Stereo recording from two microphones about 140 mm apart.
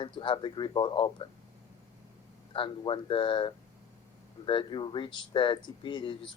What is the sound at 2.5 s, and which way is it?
Speech, 35° left (ahead or behind).